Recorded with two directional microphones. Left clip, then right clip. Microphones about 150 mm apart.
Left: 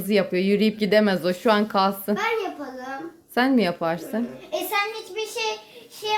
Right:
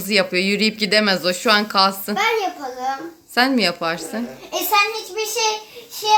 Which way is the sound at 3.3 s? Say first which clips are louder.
Right 4 dB; 15° left (ahead or behind).